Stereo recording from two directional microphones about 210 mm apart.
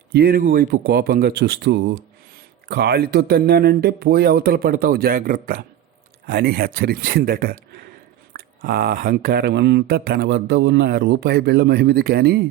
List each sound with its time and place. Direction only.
0.1 s speech: 45° right (ahead or behind)